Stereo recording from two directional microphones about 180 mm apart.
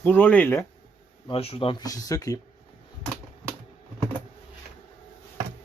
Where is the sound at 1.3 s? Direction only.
30° left (ahead or behind).